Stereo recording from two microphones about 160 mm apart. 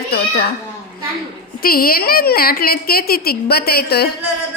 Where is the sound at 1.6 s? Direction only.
65° left (ahead or behind).